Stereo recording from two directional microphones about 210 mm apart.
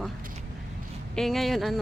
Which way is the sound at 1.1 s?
Centre (ahead or behind).